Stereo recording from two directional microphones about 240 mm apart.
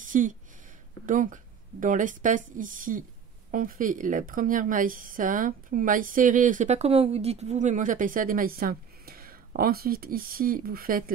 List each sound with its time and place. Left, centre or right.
0.0 s a woman's voice: right